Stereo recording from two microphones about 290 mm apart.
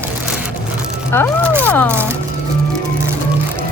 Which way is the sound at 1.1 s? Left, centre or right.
Centre.